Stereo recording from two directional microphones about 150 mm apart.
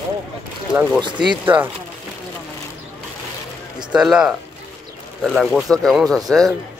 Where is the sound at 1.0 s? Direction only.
30° right (ahead or behind).